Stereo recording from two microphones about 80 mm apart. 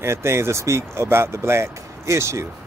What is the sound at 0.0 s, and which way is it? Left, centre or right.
Speech, right.